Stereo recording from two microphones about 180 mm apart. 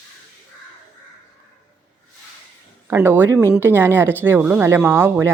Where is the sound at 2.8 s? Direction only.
10° right (ahead or behind).